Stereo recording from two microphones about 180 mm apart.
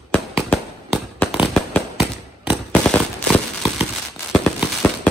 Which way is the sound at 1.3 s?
Centre (ahead or behind).